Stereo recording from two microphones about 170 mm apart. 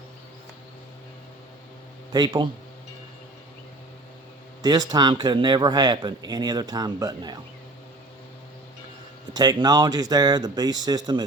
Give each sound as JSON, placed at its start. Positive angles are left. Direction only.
{"t": 2.1, "sound": "speech", "side_deg": -25}
{"t": 4.6, "sound": "speech", "side_deg": -25}
{"t": 9.3, "sound": "speech", "side_deg": -25}